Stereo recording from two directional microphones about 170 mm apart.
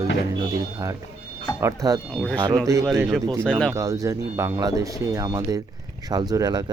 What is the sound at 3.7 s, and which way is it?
Speech, 20° right (ahead or behind).